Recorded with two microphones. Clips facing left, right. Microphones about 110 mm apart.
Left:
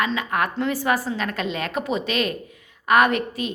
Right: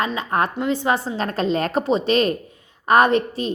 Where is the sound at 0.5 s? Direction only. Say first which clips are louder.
Right 2 dB; 20° right (ahead or behind).